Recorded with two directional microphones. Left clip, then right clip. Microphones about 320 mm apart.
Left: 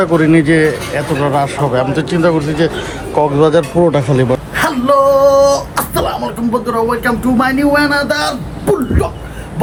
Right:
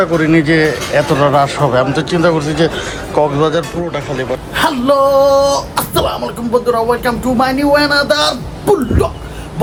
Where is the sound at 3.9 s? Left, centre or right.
Centre.